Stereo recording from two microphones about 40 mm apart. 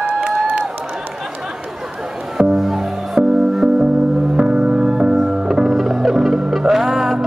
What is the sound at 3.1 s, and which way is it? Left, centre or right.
Music, centre.